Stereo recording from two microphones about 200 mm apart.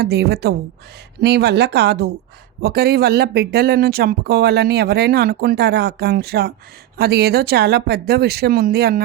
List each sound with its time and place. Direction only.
0.0 s speech: 55° right (ahead or behind)